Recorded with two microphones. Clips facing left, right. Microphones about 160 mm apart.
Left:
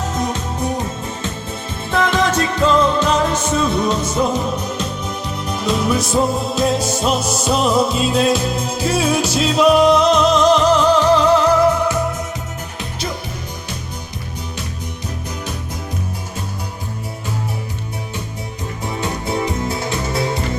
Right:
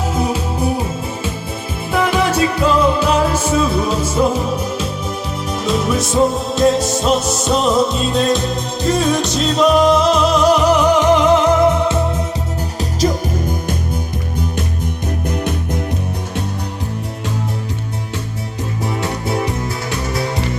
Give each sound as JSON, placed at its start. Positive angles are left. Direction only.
{"t": 0.1, "sound": "music", "side_deg": -10}
{"t": 12.8, "sound": "music", "side_deg": -40}
{"t": 15.3, "sound": "music", "side_deg": -60}